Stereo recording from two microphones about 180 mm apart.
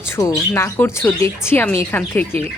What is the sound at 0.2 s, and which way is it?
Speech, 15° left (ahead or behind).